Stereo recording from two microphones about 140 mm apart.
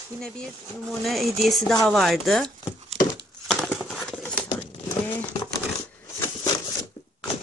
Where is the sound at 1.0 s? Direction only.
Centre (ahead or behind).